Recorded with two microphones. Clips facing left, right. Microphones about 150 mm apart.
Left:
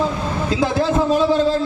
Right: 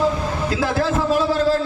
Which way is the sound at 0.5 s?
20° left (ahead or behind).